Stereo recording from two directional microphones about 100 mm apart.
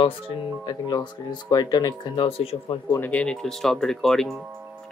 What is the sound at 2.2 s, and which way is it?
Speech, 65° left (ahead or behind).